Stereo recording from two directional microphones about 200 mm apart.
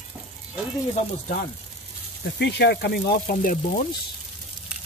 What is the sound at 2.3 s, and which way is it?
Speech, 55° left (ahead or behind).